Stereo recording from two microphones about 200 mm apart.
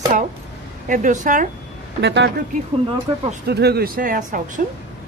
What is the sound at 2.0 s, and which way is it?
Speech, 60° right (ahead or behind).